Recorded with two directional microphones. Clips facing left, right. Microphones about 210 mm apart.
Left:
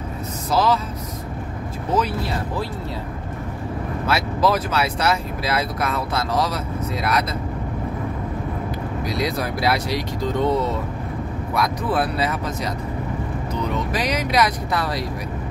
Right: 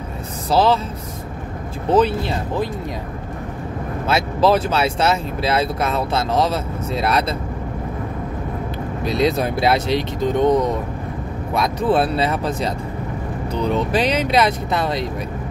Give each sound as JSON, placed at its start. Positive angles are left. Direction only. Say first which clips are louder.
{"t": 0.5, "sound": "speech", "louder": "right 3 dB", "side_deg": -30}
{"t": 1.9, "sound": "speech", "louder": "right 6 dB", "side_deg": -30}
{"t": 4.1, "sound": "speech", "louder": "right 4 dB", "side_deg": -25}
{"t": 9.0, "sound": "speech", "louder": "right 7 dB", "side_deg": -25}